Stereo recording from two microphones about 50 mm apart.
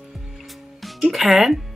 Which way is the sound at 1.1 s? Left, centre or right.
Centre.